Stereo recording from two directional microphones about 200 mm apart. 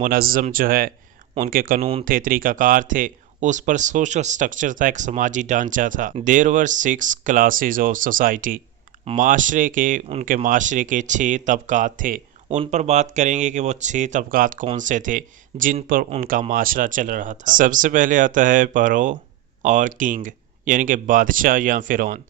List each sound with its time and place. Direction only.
0.0 s speech: 45° right (ahead or behind)
1.8 s speech: 30° right (ahead or behind)
2.0 s speech: 45° right (ahead or behind)